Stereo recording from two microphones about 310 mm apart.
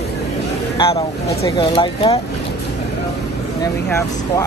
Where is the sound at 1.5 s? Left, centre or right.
Centre.